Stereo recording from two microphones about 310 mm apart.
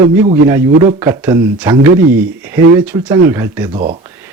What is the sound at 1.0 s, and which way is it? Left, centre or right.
Speech, centre.